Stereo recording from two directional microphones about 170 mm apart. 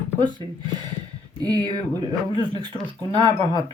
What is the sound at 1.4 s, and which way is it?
Speech, 20° right (ahead or behind).